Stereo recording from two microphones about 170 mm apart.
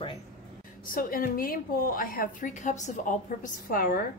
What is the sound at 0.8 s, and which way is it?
Speech, 55° left (ahead or behind).